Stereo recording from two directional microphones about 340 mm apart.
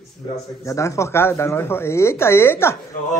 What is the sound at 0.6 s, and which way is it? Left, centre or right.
Speech, centre.